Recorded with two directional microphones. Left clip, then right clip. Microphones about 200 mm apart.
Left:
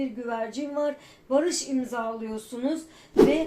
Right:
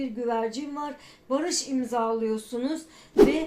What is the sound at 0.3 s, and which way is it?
Speech, 35° right (ahead or behind).